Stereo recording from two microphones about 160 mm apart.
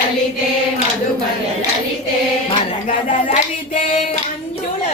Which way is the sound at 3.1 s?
50° left (ahead or behind).